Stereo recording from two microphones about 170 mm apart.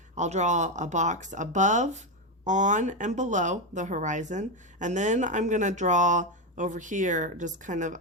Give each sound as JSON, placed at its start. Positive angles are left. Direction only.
{"t": 0.2, "sound": "speech", "side_deg": -45}